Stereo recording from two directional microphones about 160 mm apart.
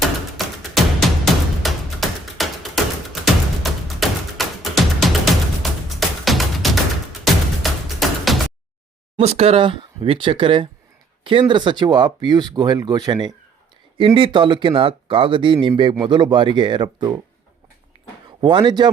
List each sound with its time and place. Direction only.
0.3 s music: centre (ahead or behind)
9.1 s speech: 40° right (ahead or behind)
18.3 s speech: 30° right (ahead or behind)